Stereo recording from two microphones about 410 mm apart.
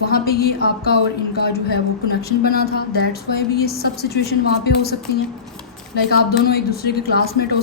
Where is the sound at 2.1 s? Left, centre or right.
Left.